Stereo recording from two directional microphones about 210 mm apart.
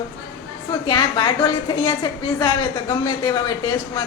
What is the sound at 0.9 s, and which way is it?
A woman's voice, 20° left (ahead or behind).